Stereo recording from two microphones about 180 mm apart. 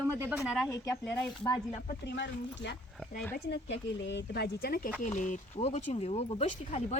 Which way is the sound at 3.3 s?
70° left (ahead or behind).